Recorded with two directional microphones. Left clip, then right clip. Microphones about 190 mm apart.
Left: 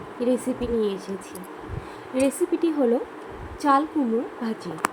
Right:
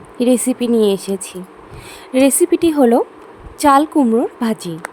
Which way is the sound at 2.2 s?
65° right (ahead or behind).